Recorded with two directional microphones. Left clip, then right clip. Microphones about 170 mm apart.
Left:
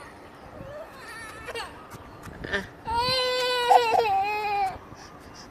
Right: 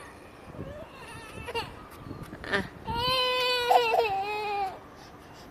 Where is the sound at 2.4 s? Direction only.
20° right (ahead or behind).